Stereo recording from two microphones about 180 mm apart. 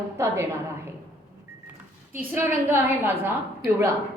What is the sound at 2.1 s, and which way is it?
Speech, 10° right (ahead or behind).